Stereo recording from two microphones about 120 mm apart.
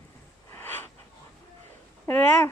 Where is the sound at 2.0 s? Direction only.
10° left (ahead or behind).